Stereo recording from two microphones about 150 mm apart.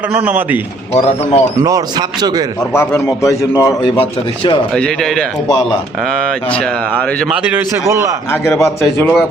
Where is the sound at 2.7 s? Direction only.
15° left (ahead or behind).